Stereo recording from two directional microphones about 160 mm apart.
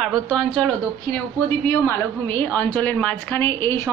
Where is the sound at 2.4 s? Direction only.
10° left (ahead or behind).